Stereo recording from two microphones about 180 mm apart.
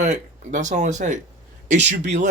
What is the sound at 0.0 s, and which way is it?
Speech, 40° right (ahead or behind).